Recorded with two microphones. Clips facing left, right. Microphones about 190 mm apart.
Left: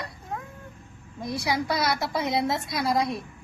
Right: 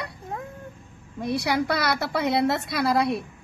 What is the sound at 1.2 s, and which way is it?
A woman's voice, 65° right (ahead or behind).